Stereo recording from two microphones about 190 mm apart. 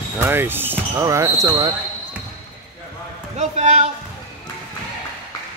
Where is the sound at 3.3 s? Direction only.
35° right (ahead or behind).